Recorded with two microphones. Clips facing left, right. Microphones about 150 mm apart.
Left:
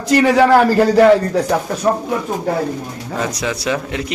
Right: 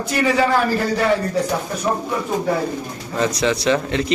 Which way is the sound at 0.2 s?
80° left.